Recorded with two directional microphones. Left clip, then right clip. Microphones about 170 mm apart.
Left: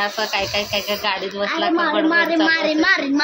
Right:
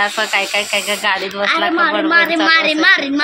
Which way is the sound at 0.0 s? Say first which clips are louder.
Right 5 dB; 10° right (ahead or behind).